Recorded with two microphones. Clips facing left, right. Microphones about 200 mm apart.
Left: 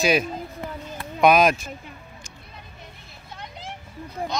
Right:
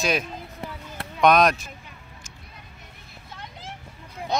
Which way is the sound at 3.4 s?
15° left (ahead or behind).